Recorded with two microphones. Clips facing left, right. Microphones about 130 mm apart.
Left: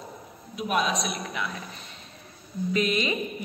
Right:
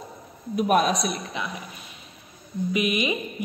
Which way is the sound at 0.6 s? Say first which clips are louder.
Right 5 dB; 50° right (ahead or behind).